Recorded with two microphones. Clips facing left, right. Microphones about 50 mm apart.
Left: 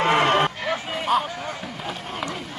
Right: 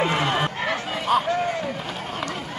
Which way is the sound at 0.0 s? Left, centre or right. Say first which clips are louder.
Left 4 dB; left.